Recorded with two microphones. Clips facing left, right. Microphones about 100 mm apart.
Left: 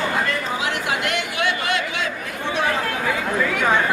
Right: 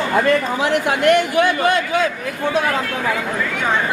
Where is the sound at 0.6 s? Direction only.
45° right (ahead or behind).